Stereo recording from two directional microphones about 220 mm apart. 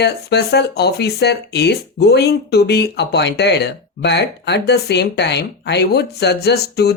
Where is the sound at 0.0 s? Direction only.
50° left (ahead or behind).